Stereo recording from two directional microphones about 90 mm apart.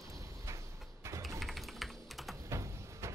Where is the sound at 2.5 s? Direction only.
35° right (ahead or behind).